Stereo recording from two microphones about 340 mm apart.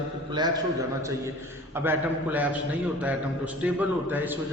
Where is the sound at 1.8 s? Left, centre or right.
Centre.